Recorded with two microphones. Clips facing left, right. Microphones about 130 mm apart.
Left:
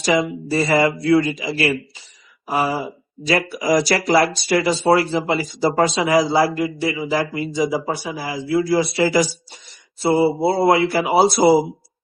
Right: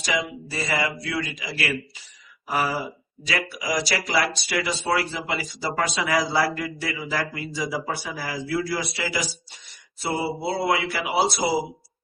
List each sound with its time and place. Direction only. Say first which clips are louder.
0.0 s speech: left 8 dB; 35° left (ahead or behind)
3.2 s speech: left 9 dB; 35° left (ahead or behind)
11.1 s speech: left 9 dB; 50° left (ahead or behind)